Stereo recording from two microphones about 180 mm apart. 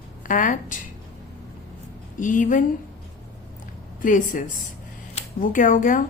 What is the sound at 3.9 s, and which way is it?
Speech, 45° left (ahead or behind).